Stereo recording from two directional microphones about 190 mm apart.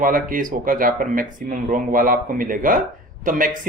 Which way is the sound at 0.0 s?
45° right (ahead or behind).